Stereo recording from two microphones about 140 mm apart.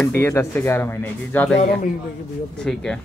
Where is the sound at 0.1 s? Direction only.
15° left (ahead or behind).